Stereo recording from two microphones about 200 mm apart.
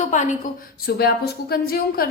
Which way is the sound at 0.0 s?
40° left (ahead or behind).